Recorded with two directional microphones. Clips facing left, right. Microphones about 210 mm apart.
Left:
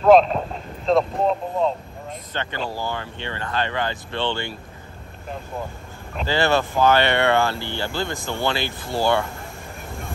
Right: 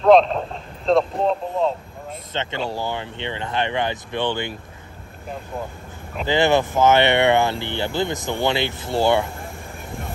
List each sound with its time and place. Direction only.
0.1 s speech: 5° left (ahead or behind)
2.3 s speech: 20° right (ahead or behind)
6.2 s speech: 20° right (ahead or behind)